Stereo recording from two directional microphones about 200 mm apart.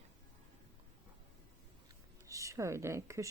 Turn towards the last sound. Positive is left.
turn(degrees=-15)  # may be behind; listen again after turning